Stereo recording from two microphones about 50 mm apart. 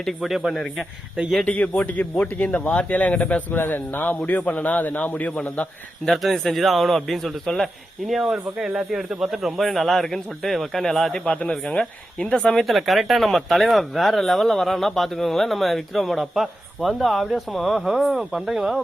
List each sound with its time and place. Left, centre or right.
0.2 s speech: centre
1.5 s speech: left
3.5 s speech: left
6.1 s speech: centre
11.1 s speech: left
11.4 s speech: centre